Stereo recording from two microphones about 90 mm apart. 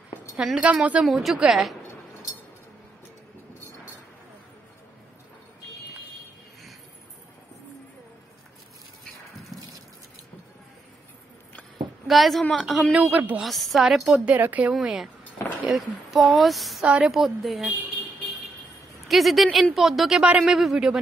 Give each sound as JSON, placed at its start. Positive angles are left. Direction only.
{"t": 0.6, "sound": "speech", "side_deg": -15}
{"t": 1.0, "sound": "a woman's voice", "side_deg": 0}
{"t": 12.1, "sound": "a woman's voice", "side_deg": 0}
{"t": 12.9, "sound": "speech", "side_deg": -20}
{"t": 13.4, "sound": "a woman's voice", "side_deg": 0}
{"t": 14.1, "sound": "speech", "side_deg": -20}
{"t": 14.7, "sound": "a woman's voice", "side_deg": -5}
{"t": 16.8, "sound": "speech", "side_deg": -15}
{"t": 17.1, "sound": "a woman's voice", "side_deg": 0}
{"t": 19.0, "sound": "a woman's voice", "side_deg": 0}